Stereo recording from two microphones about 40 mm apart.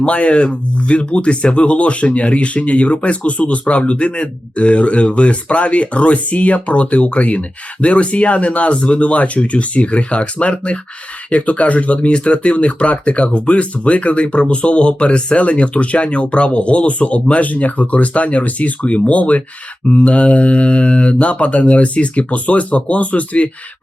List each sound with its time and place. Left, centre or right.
0.0 s speech: left